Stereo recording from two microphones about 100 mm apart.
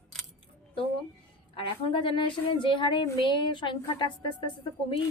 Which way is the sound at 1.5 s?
60° left (ahead or behind).